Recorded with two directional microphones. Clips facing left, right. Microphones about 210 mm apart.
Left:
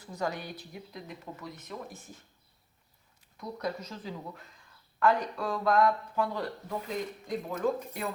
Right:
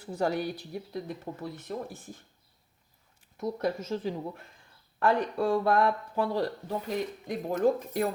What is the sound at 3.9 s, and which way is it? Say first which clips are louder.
Speech: right 8 dB; 25° right (ahead or behind).